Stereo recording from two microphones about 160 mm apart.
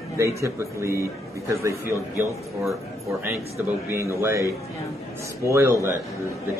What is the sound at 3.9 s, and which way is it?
A man's voice, 15° right (ahead or behind).